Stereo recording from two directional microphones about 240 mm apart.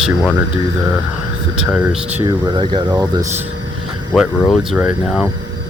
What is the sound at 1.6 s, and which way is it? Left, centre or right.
Speech, centre.